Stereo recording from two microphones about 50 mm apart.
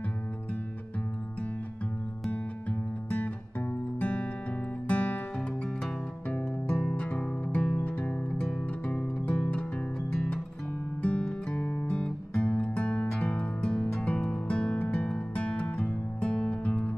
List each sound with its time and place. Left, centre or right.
4.0 s music: left
6.7 s music: centre
11.0 s music: left
11.9 s music: left